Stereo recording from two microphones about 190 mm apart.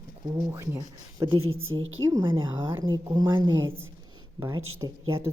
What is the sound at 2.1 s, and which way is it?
A woman's voice, 25° right (ahead or behind).